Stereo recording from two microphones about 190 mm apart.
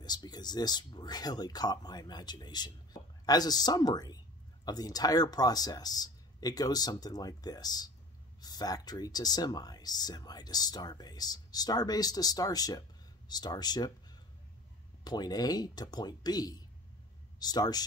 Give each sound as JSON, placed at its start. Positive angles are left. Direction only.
{"t": 0.0, "sound": "speech", "side_deg": 20}
{"t": 15.0, "sound": "speech", "side_deg": 20}